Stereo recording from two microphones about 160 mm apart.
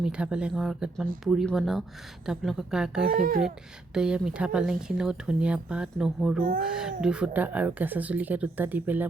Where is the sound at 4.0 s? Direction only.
5° right (ahead or behind).